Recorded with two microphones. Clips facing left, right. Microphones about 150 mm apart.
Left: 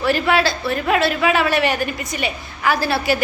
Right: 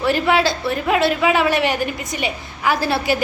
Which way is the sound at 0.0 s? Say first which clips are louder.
Right 1 dB; 15° right (ahead or behind).